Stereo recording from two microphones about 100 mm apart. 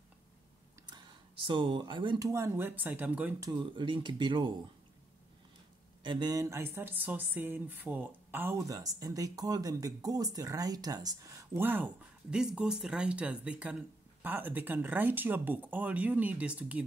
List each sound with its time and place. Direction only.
0.8 s a sound: 50° right (ahead or behind)
2.1 s speech: 30° right (ahead or behind); by 3.3 s 15° right (ahead or behind)
3.3 s speech: 40° right (ahead or behind)
3.7 s speech: 55° right (ahead or behind)
6.0 s speech: 45° right (ahead or behind); by 8.6 s 20° right (ahead or behind)
8.6 s speech: 35° right (ahead or behind)
11.6 s speech: 20° right (ahead or behind)
12.4 s speech: 10° right (ahead or behind)